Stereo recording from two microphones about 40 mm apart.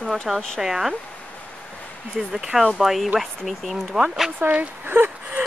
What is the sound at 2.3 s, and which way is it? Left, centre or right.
Speech, centre.